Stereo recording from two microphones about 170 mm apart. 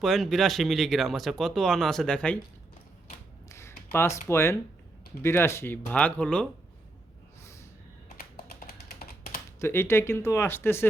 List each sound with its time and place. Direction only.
0.0 s speech: centre (ahead or behind)
3.5 s a sound: 15° left (ahead or behind)
4.3 s speech: 15° left (ahead or behind)
7.4 s snort: 15° left (ahead or behind)
8.2 s typing: 65° left (ahead or behind)
9.6 s speech: 15° left (ahead or behind)